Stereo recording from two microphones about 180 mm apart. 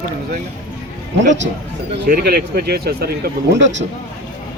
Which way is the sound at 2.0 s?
60° right (ahead or behind).